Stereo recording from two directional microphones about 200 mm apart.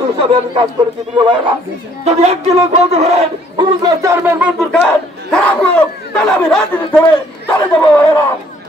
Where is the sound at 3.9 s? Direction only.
15° right (ahead or behind).